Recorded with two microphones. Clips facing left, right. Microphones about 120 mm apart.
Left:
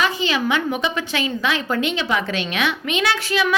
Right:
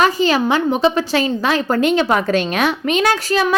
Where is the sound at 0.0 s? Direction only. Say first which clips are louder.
Right 6 dB; 40° right (ahead or behind).